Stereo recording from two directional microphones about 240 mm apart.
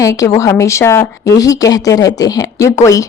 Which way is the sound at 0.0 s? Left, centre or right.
Centre.